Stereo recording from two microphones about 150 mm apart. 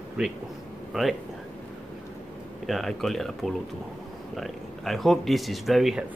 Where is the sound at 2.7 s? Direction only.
Centre (ahead or behind).